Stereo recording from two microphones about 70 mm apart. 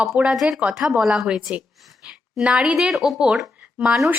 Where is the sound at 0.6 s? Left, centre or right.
Centre.